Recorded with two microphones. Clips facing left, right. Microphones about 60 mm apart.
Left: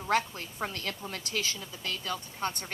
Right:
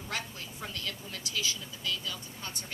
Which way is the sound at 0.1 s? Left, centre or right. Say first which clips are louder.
Left 10 dB; left.